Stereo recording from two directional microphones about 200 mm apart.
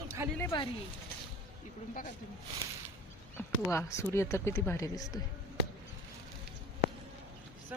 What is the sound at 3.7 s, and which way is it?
Speech, 15° left (ahead or behind).